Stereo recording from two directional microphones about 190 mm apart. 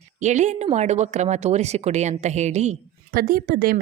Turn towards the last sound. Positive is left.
turn(degrees=-50)  # may be behind; listen again after turning